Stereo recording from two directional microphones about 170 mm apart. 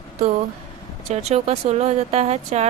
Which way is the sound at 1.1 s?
40° right (ahead or behind).